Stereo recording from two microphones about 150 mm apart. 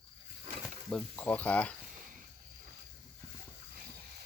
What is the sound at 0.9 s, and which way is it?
Speech, 10° left (ahead or behind).